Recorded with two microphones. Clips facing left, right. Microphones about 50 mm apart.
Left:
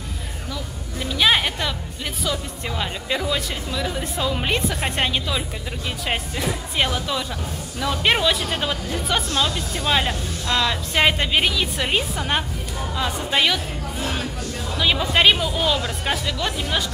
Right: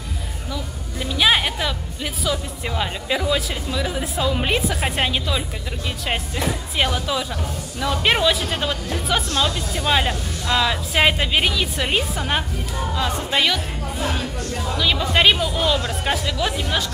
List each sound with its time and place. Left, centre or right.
0.9 s music: centre
2.2 s speech: centre